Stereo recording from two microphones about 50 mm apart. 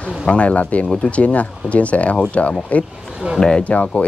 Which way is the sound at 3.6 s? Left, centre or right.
Left.